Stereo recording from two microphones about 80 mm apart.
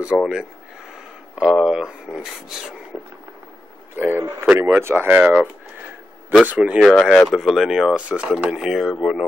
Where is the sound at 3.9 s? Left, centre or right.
Right.